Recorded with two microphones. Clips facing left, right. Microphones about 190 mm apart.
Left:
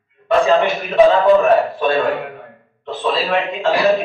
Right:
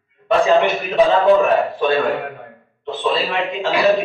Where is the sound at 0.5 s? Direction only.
Centre (ahead or behind).